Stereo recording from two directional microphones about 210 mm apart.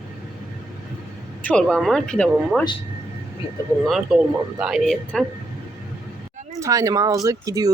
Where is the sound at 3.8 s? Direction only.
Centre (ahead or behind).